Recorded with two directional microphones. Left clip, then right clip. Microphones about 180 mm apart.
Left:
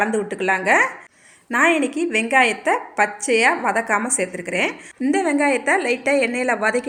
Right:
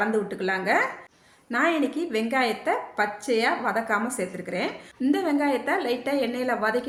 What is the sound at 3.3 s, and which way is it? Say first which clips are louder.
A woman's voice: left 6 dB; 30° left (ahead or behind).